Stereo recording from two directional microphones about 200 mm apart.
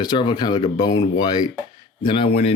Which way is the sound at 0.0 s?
20° left (ahead or behind).